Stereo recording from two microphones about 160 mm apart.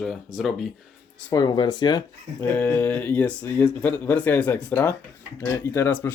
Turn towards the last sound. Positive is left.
turn(degrees=10)  # may be behind; listen again after turning